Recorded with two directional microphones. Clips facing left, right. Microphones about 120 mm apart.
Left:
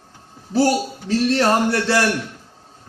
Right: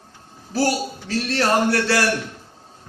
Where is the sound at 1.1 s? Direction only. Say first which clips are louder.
Left 3 dB; 25° left (ahead or behind).